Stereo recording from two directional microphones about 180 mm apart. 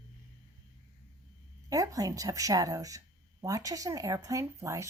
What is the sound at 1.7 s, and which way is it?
Speech, 20° right (ahead or behind).